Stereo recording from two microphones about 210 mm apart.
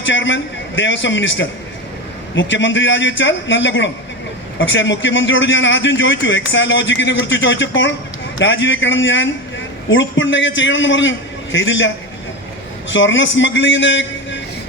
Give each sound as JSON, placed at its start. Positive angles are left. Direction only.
{"t": 0.0, "sound": "a man's voice", "side_deg": 60}
{"t": 12.9, "sound": "a man's voice", "side_deg": 60}